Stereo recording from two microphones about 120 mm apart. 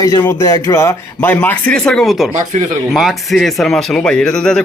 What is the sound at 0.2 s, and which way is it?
Speech, 25° left (ahead or behind).